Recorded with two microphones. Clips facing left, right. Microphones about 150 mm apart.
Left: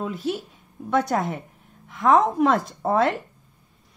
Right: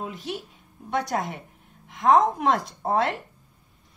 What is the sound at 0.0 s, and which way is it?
Speech, 45° left (ahead or behind).